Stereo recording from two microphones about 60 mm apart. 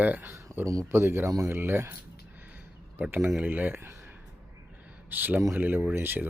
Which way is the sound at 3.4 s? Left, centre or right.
Right.